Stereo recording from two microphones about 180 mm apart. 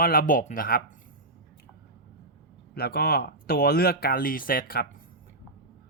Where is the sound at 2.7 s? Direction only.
60° left (ahead or behind).